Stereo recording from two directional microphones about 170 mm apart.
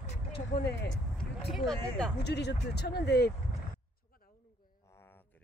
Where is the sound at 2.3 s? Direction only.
80° left.